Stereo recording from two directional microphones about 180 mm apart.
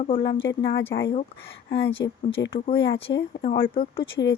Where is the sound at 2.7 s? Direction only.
90° left.